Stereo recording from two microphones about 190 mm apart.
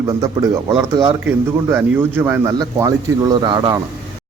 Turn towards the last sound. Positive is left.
turn(degrees=-20)  # may be behind; listen again after turning